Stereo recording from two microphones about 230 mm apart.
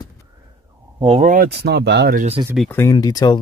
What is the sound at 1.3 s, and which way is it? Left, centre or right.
Speech, right.